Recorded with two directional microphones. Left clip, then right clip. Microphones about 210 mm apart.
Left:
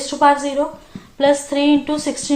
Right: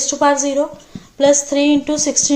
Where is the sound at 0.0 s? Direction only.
45° right (ahead or behind).